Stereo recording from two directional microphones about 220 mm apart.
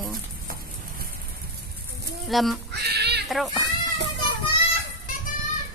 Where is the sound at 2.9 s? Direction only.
50° right (ahead or behind).